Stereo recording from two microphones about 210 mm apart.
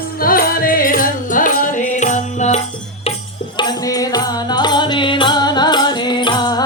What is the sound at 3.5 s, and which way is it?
Music, 20° left (ahead or behind).